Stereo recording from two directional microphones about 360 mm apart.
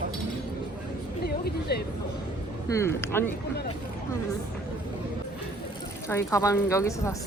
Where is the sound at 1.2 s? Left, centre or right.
Left.